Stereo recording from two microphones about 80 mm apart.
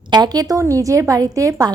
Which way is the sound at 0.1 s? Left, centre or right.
Right.